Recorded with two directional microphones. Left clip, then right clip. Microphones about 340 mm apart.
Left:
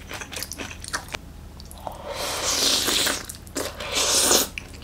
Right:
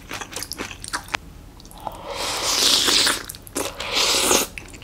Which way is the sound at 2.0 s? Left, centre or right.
Centre.